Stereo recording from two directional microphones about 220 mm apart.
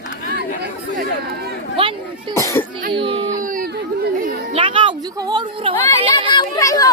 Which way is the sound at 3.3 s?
40° right (ahead or behind).